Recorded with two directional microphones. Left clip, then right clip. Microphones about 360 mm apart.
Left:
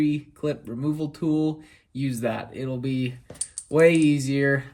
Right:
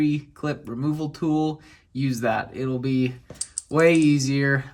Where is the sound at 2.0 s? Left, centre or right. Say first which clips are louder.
Right 4 dB; centre.